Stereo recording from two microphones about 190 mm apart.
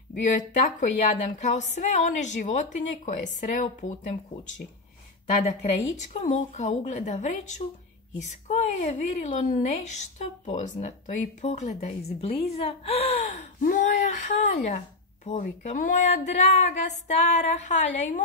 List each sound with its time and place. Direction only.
0.1 s a woman's voice: 40° left (ahead or behind)
5.9 s a woman's voice: 35° left (ahead or behind)